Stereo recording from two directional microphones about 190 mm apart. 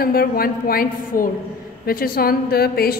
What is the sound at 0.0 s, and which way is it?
A woman's voice, 50° left (ahead or behind).